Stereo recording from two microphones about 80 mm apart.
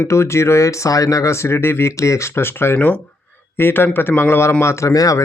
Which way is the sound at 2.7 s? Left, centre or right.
Centre.